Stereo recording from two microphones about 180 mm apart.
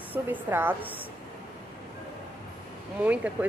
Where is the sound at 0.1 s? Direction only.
10° right (ahead or behind).